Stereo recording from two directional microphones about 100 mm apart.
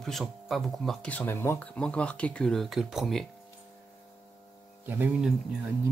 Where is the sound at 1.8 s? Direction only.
10° left (ahead or behind).